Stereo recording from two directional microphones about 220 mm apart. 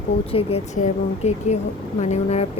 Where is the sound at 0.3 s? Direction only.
30° left (ahead or behind).